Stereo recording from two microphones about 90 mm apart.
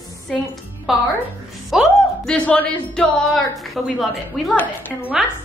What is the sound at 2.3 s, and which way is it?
Speech, 15° left (ahead or behind).